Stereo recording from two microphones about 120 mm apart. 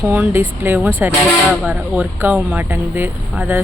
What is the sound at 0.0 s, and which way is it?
Speech, 20° right (ahead or behind).